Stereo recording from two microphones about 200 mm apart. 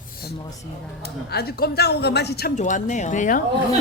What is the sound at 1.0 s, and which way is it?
Speech, 50° left (ahead or behind).